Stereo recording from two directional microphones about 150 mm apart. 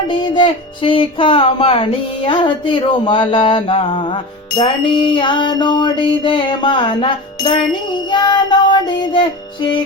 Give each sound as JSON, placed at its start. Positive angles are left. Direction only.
{"t": 0.1, "sound": "speech", "side_deg": 30}